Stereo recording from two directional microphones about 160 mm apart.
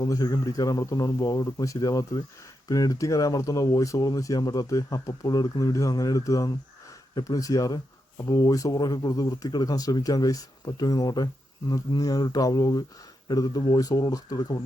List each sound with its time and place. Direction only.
0.0 s speech: 20° left (ahead or behind)